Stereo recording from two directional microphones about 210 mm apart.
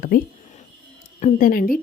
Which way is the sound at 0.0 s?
40° left (ahead or behind).